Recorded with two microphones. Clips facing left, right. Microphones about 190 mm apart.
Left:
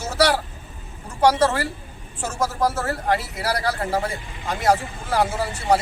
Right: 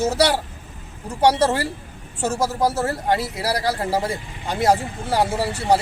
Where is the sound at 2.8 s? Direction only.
30° right (ahead or behind).